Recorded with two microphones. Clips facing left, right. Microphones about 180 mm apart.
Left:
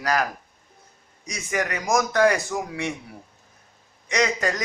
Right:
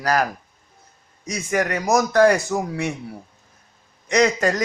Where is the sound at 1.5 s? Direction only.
45° right (ahead or behind).